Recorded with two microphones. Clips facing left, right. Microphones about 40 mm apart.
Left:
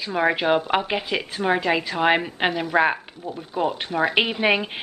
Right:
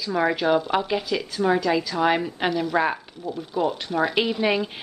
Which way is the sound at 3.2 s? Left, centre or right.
Left.